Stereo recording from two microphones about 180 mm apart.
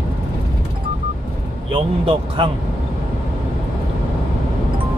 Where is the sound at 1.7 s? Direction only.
30° right (ahead or behind).